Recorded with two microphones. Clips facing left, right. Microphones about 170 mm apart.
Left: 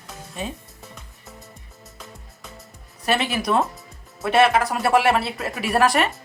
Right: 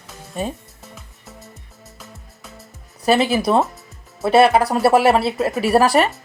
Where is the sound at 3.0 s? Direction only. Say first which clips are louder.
Right 7 dB; 35° right (ahead or behind).